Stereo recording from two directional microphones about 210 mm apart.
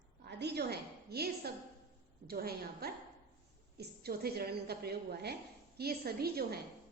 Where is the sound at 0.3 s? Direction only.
55° right (ahead or behind).